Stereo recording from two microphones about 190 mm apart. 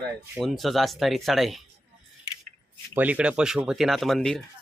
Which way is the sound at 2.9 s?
10° right (ahead or behind).